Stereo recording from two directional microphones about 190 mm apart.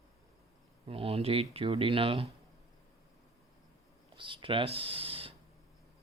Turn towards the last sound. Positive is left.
turn(degrees=-30)  # may be behind; listen again after turning